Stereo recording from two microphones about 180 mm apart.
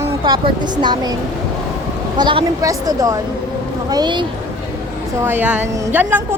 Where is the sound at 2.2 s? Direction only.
25° right (ahead or behind).